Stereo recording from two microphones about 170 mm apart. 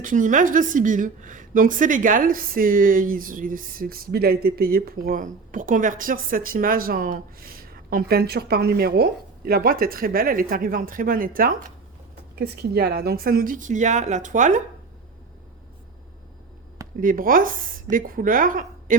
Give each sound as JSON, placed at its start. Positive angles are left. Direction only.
{"t": 0.0, "sound": "a woman's voice", "side_deg": -50}
{"t": 12.4, "sound": "a woman's voice", "side_deg": -70}
{"t": 17.0, "sound": "a woman's voice", "side_deg": -55}